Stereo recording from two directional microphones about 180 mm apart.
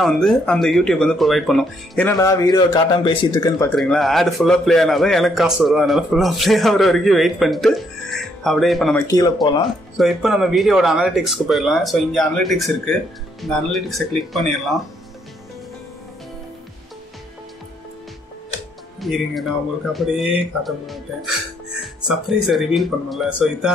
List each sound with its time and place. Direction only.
0.0 s a man's voice: centre (ahead or behind)
2.1 s a man's voice: 20° left (ahead or behind)
3.7 s a man's voice: 5° left (ahead or behind)
8.9 s speech: 20° left (ahead or behind)
9.9 s a man's voice: centre (ahead or behind)
18.9 s a man's voice: centre (ahead or behind)